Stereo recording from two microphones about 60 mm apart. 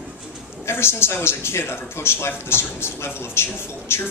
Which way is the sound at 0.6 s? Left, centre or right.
Left.